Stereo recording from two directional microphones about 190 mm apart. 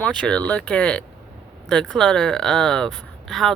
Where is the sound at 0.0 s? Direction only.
5° left (ahead or behind).